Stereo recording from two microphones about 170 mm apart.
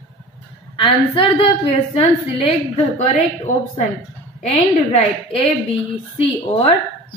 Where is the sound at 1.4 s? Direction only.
35° left (ahead or behind).